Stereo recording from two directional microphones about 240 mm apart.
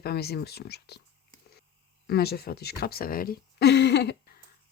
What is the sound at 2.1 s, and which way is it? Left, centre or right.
Speech, left.